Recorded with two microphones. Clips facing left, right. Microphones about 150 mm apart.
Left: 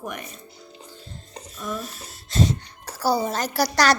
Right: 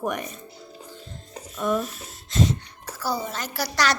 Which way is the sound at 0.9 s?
5° right (ahead or behind).